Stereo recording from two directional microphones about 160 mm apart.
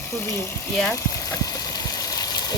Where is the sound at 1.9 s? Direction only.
25° left (ahead or behind).